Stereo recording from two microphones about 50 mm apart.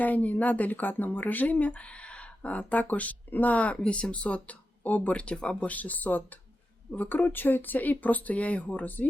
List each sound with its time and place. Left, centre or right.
0.0 s speech: left
3.8 s speech: centre